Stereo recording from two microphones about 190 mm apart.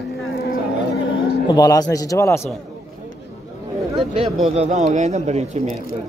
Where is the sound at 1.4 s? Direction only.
20° left (ahead or behind).